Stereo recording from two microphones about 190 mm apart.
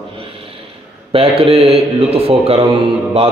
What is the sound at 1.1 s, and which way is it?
Speech, 30° right (ahead or behind).